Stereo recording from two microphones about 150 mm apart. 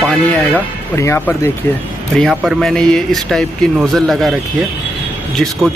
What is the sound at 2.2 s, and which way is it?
Speech, centre (ahead or behind).